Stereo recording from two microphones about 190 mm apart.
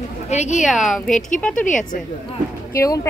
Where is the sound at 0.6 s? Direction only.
Centre (ahead or behind).